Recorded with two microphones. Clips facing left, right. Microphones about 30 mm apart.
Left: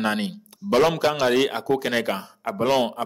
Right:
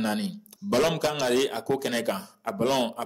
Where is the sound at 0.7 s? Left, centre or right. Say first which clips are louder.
Left 5 dB; centre.